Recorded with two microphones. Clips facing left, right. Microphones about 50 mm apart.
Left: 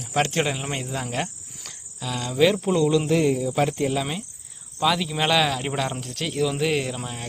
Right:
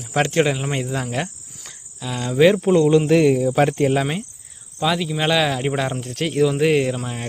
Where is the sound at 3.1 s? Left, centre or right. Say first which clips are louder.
Right 6 dB; right.